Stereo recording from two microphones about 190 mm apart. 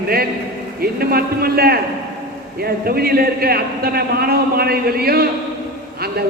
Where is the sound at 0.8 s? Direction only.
55° right (ahead or behind).